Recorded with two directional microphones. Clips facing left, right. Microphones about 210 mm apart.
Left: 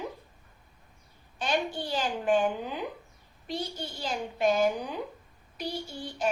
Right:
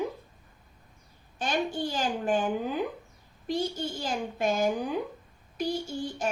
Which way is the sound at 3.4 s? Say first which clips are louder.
Right 5 dB; 45° right (ahead or behind).